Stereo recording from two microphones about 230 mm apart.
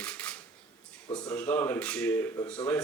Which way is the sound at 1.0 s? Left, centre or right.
Centre.